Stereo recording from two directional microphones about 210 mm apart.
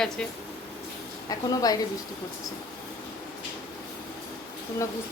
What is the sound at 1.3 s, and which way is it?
Speech, 15° left (ahead or behind).